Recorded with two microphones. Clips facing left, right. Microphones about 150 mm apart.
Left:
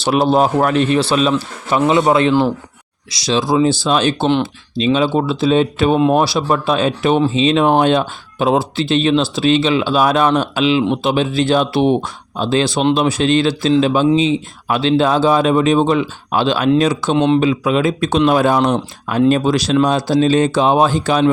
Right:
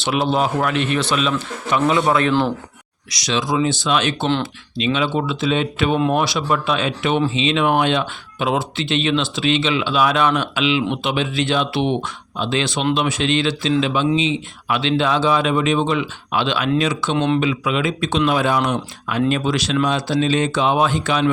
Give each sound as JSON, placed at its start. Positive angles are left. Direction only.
{"t": 0.0, "sound": "a man's voice", "side_deg": 40}
{"t": 17.2, "sound": "a man's voice", "side_deg": 20}
{"t": 17.4, "sound": "speech", "side_deg": 35}